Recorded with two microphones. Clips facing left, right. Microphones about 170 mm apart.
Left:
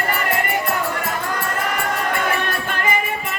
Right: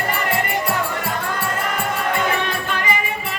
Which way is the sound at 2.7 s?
50° left (ahead or behind).